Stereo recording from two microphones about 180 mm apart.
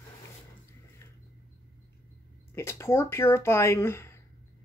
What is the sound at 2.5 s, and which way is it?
Speech, 15° left (ahead or behind).